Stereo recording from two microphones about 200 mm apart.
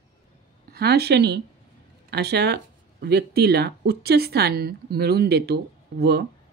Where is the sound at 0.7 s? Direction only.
55° right (ahead or behind).